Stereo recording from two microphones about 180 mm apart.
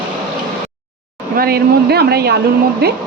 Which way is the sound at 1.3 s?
55° right (ahead or behind).